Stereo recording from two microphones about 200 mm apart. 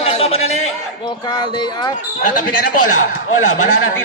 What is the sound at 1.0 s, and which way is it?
Speech, 20° left (ahead or behind).